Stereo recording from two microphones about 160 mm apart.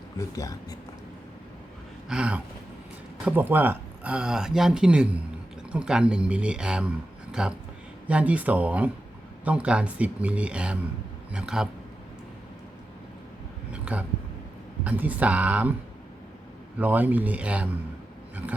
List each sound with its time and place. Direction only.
0.2 s speech: 20° left (ahead or behind)
2.0 s speech: 5° right (ahead or behind)
13.9 s speech: 5° right (ahead or behind)
16.8 s speech: 10° right (ahead or behind)